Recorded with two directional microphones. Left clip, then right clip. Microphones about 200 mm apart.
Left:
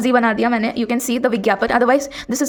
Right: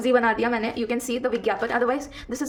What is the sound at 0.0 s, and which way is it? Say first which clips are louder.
A woman's voice: left 4 dB; 50° left (ahead or behind).